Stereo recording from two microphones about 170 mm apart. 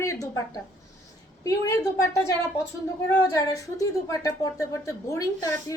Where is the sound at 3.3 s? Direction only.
20° left (ahead or behind).